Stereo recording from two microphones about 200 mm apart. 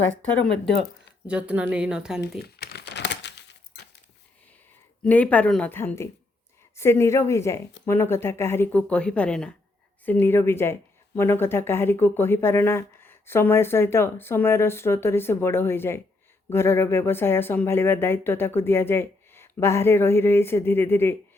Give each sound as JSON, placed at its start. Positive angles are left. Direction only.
{"t": 0.0, "sound": "speech", "side_deg": 10}
{"t": 1.3, "sound": "speech", "side_deg": -5}
{"t": 2.4, "sound": "crumpling", "side_deg": 55}
{"t": 5.0, "sound": "speech", "side_deg": 5}